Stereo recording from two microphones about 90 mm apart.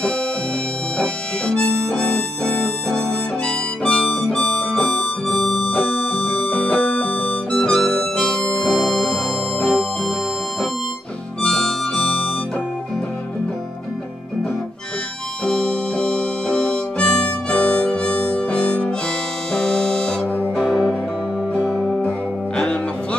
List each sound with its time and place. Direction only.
0.9 s harmonica: 10° left (ahead or behind)
5.9 s music: 15° left (ahead or behind)
7.5 s harmonica: 5° left (ahead or behind)
11.4 s harmonica: 10° left (ahead or behind)
15.4 s harmonica: 10° left (ahead or behind)
19.5 s music: 5° left (ahead or behind)